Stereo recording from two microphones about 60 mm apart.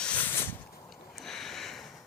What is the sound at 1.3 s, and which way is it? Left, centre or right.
Sniff, centre.